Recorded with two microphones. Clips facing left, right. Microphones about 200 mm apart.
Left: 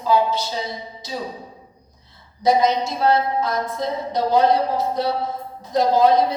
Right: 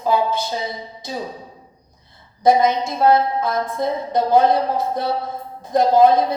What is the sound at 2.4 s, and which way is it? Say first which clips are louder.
A woman's voice: right 2 dB; 55° right (ahead or behind).